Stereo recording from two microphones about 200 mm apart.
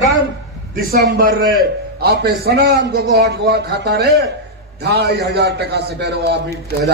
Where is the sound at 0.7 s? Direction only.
50° right (ahead or behind).